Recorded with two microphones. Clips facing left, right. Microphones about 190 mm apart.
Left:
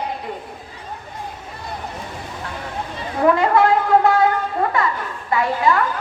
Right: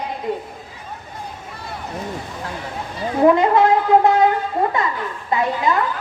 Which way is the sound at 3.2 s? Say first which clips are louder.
Right 2 dB; 20° right (ahead or behind).